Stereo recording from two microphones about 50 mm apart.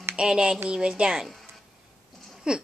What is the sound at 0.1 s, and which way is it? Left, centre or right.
A woman's voice, centre.